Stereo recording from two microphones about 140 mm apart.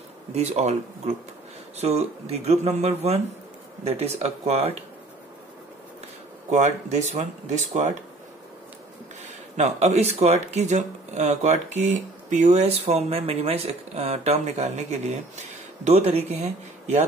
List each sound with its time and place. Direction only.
0.3 s speech: 50° right (ahead or behind)
6.5 s speech: 55° right (ahead or behind)
9.6 s speech: 50° right (ahead or behind)